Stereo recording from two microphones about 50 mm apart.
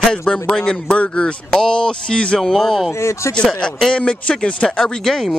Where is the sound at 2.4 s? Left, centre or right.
Centre.